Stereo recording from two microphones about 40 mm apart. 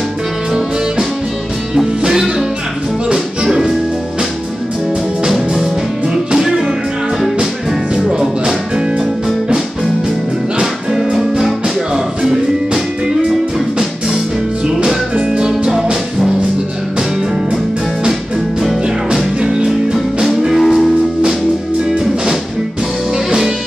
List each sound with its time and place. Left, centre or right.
1.8 s music: centre
3.4 s music: centre
6.3 s music: centre
7.9 s music: centre
10.6 s music: centre
15.3 s music: centre
19.4 s music: centre
20.5 s music: centre
23.1 s music: centre